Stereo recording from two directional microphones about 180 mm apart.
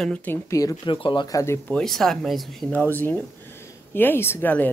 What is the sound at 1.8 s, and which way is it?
Speech, centre (ahead or behind).